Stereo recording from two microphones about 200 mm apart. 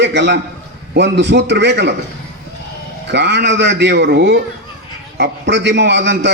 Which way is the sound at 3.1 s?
60° right (ahead or behind).